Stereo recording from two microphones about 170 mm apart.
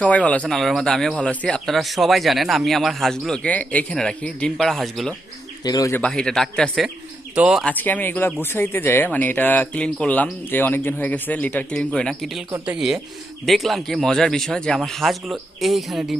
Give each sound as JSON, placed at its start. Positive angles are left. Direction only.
{"t": 0.0, "sound": "speech", "side_deg": 10}
{"t": 5.6, "sound": "speech", "side_deg": 20}
{"t": 6.0, "sound": "speech", "side_deg": 5}
{"t": 7.6, "sound": "speech", "side_deg": 10}
{"t": 12.5, "sound": "speech", "side_deg": -15}
{"t": 12.7, "sound": "speech", "side_deg": -5}